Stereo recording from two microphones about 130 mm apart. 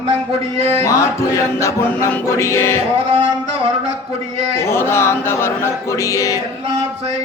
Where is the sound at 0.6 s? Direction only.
50° right (ahead or behind).